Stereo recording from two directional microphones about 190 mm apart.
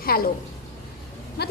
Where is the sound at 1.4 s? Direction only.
55° left (ahead or behind).